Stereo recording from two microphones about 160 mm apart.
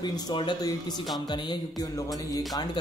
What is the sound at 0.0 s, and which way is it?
Music, 30° left (ahead or behind).